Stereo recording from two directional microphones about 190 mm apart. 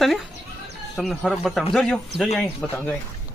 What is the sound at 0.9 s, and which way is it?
Speech, centre (ahead or behind).